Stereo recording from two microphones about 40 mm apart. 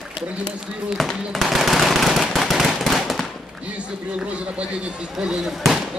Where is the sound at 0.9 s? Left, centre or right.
Centre.